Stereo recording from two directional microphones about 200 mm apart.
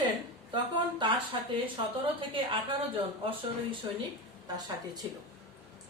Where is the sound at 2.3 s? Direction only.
25° right (ahead or behind).